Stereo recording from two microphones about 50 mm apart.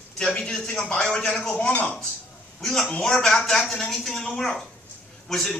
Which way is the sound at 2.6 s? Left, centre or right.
Centre.